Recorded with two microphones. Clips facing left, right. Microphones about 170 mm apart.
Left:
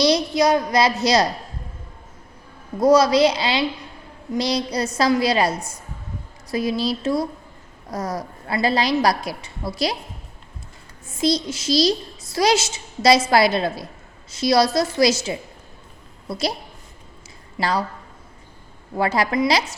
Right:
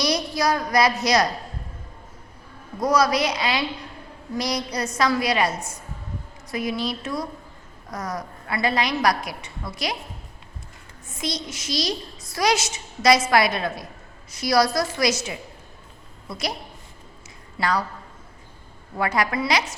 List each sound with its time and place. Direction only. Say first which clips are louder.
0.0 s a child's voice: left 6 dB; 25° left (ahead or behind)
2.8 s a child's voice: left 6 dB; 25° left (ahead or behind)
11.2 s a child's voice: left 9 dB; 30° left (ahead or behind)
17.6 s a child's voice: left 2 dB; 30° left (ahead or behind)
18.9 s a child's voice: left 3 dB; 30° left (ahead or behind)